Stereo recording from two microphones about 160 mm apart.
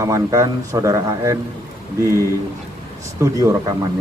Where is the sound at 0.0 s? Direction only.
20° right (ahead or behind).